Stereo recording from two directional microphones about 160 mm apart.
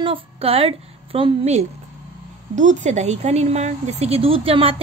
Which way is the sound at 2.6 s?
50° right (ahead or behind).